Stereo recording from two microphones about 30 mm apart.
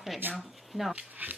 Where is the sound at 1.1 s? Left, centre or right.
Right.